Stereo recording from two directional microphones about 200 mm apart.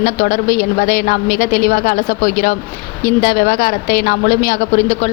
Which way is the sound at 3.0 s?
45° left (ahead or behind).